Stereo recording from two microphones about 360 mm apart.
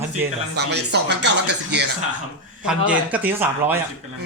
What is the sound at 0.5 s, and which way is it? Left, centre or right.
Speech, right.